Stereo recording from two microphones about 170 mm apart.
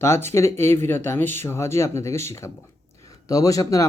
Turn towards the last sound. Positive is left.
turn(degrees=20)  # may be behind; listen again after turning